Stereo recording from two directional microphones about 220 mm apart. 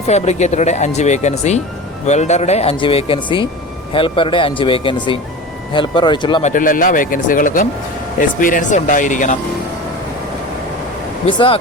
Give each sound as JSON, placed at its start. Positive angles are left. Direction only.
{"t": 0.1, "sound": "speech", "side_deg": 30}
{"t": 6.5, "sound": "speech", "side_deg": 40}
{"t": 11.3, "sound": "speech", "side_deg": 25}